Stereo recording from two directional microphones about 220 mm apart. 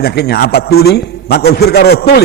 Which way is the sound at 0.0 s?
45° left (ahead or behind).